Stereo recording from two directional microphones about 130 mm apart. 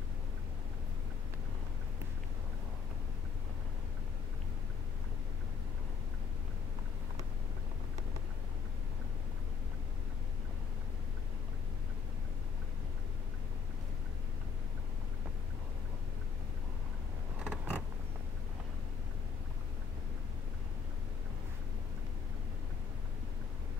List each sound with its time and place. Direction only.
17.4 s creak: 10° right (ahead or behind)